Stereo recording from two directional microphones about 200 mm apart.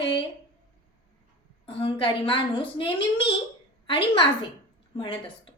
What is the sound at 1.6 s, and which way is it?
A woman's voice, 25° left (ahead or behind).